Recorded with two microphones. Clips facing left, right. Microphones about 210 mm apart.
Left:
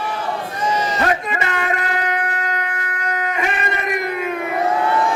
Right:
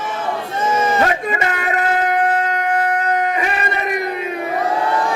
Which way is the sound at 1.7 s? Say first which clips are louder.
Right 5 dB; 45° right (ahead or behind).